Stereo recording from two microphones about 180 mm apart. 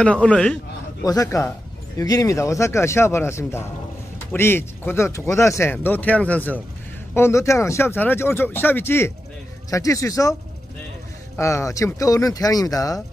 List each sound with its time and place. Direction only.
0.0 s a man's voice: 5° left (ahead or behind)
1.0 s speech: 20° left (ahead or behind)
11.3 s speech: 15° left (ahead or behind)